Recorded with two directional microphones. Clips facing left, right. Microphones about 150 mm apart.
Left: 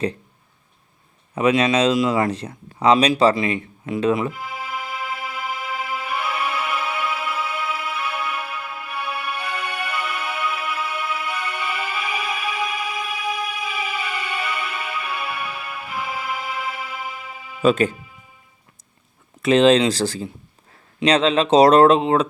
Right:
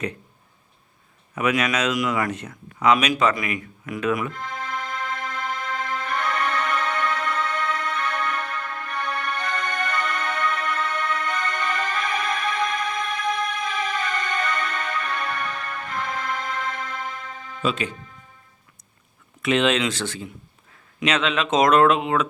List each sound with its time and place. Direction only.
1.4 s speech: 30° left (ahead or behind)
4.3 s music: 10° left (ahead or behind)
17.6 s speech: 45° left (ahead or behind)
17.9 s music: 10° left (ahead or behind)
19.4 s speech: 35° left (ahead or behind)